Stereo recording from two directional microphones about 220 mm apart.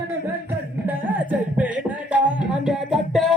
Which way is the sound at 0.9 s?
5° right (ahead or behind).